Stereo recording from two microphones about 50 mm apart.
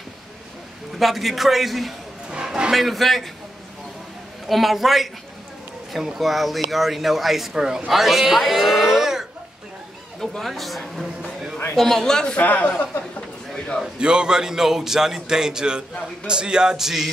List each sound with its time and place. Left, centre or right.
0.9 s speech: centre
2.4 s a sound: centre
2.7 s speech: centre
4.5 s speech: centre
10.2 s a man's voice: centre
12.4 s a man's voice: left
13.9 s speech: centre